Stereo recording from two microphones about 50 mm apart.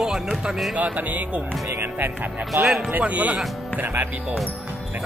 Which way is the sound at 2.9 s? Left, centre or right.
Right.